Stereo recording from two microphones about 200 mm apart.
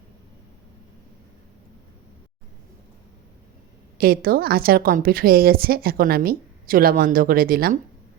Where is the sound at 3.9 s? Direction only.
45° right (ahead or behind).